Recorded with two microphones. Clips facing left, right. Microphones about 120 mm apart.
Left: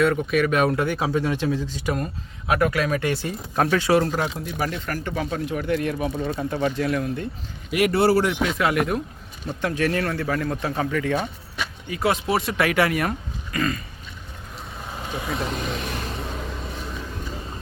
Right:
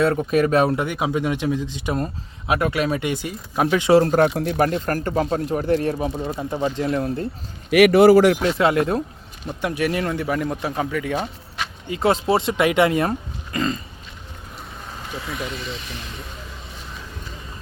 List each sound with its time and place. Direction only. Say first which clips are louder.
0.0 s speech: right 2 dB; 35° right (ahead or behind)
0.8 s speech: even; 15° right (ahead or behind)
4.0 s speech: right 7 dB; 45° right (ahead or behind)
4.4 s speech: right 8 dB; 60° right (ahead or behind)
4.7 s speech: right 6 dB; 45° right (ahead or behind); by 7.0 s 25° right (ahead or behind)
7.7 s a man's voice: right 7 dB; 90° right
8.4 s speech: right 3 dB; 30° right (ahead or behind)
9.6 s speech: right 1 dB; 15° right (ahead or behind)
11.9 s speech: right 4 dB; 25° right (ahead or behind)
15.1 s speech: left 3 dB; 20° left (ahead or behind)
15.4 s speech: left 3 dB; 45° left (ahead or behind)